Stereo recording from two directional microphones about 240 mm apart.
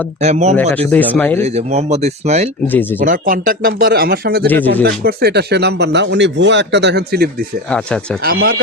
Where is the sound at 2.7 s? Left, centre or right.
Centre.